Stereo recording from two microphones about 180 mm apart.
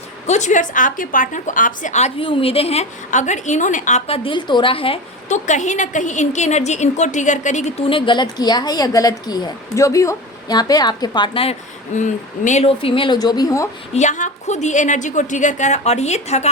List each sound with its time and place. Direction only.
0.3 s a woman's voice: 40° left (ahead or behind)
7.9 s a woman's voice: 30° left (ahead or behind)
11.9 s a woman's voice: 40° left (ahead or behind); by 13.7 s 20° left (ahead or behind)
13.9 s a woman's voice: 40° left (ahead or behind)